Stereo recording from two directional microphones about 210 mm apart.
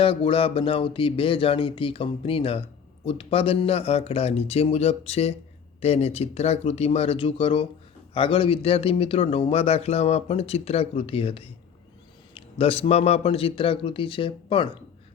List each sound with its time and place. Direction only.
0.0 s speech: 25° left (ahead or behind)